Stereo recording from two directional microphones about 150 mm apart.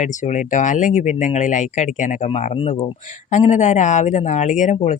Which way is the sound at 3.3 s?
50° left (ahead or behind).